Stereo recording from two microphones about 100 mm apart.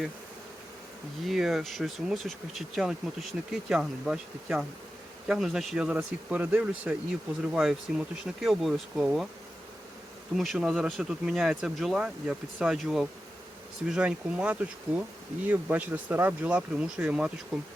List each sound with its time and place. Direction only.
1.2 s speech: centre (ahead or behind)
10.3 s speech: centre (ahead or behind)